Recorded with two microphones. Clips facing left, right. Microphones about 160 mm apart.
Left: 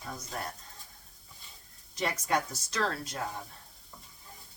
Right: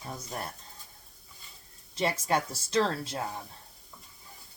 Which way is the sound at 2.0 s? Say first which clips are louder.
Right 2 dB; 30° right (ahead or behind).